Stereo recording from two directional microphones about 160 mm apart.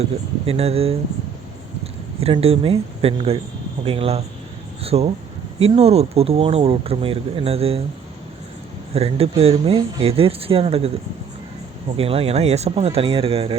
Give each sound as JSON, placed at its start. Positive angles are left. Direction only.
{"t": 0.4, "sound": "speech", "side_deg": -40}
{"t": 2.2, "sound": "speech", "side_deg": -35}
{"t": 8.9, "sound": "speech", "side_deg": -40}
{"t": 11.9, "sound": "speech", "side_deg": -35}